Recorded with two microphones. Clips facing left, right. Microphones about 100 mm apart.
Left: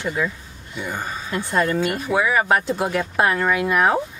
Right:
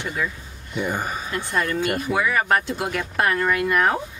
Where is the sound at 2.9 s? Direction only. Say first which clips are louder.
Left 1 dB; 20° left (ahead or behind).